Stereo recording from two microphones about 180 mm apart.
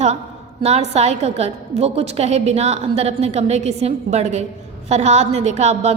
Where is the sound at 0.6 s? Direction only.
35° right (ahead or behind).